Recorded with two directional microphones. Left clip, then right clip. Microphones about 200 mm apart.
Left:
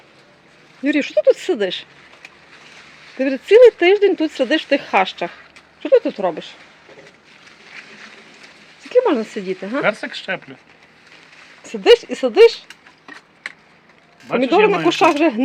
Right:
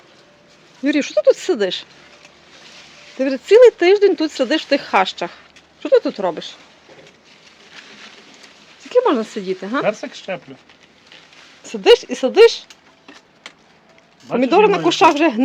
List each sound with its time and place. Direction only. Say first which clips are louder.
0.9 s speech: even; centre (ahead or behind)
3.2 s speech: even; 5° left (ahead or behind)
8.9 s speech: even; 5° left (ahead or behind)
9.8 s speech: left 1 dB; 20° right (ahead or behind)
11.6 s speech: even; 5° left (ahead or behind)
14.3 s speech: right 1 dB; centre (ahead or behind)